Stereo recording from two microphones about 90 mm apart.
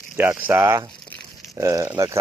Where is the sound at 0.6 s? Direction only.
35° right (ahead or behind).